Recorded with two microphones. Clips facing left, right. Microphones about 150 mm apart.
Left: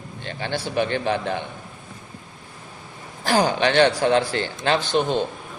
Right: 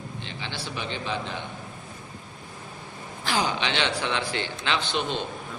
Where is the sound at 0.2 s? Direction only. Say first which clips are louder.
Left 11 dB; 50° left (ahead or behind).